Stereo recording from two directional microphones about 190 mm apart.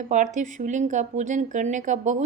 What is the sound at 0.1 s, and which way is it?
A woman's voice, 40° right (ahead or behind).